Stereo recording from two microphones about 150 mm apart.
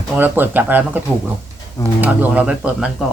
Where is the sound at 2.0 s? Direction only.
10° right (ahead or behind).